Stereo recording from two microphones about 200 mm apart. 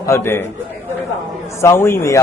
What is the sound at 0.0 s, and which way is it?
Speech, 15° left (ahead or behind).